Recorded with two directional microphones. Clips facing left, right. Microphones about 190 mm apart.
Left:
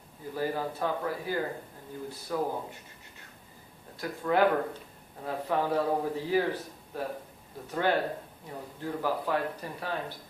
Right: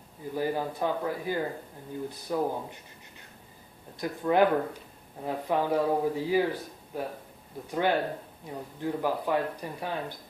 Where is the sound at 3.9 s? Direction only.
15° right (ahead or behind).